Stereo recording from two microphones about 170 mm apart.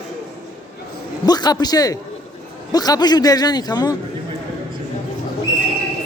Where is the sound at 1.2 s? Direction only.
25° left (ahead or behind).